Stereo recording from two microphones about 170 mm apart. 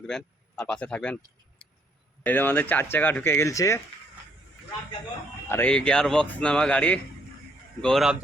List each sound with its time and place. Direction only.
0.1 s speech: 5° left (ahead or behind)
5.5 s a man's voice: 10° left (ahead or behind)